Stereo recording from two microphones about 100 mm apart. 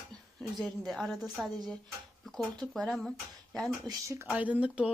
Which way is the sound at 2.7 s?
5° left (ahead or behind).